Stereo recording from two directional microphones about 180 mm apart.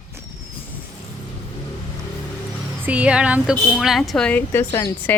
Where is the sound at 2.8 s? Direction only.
5° right (ahead or behind).